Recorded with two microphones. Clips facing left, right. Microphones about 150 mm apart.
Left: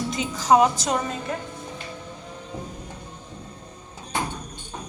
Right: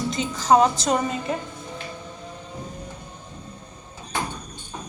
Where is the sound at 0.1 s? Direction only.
10° left (ahead or behind).